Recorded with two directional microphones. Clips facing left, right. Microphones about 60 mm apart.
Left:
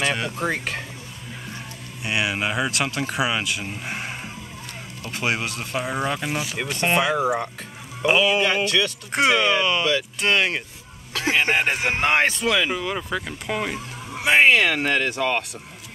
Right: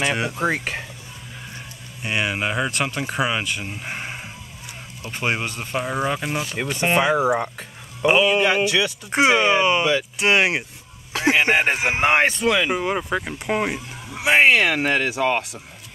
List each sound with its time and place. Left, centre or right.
0.0 s speech: centre
2.0 s speech: centre
12.7 s speech: right
13.7 s speech: centre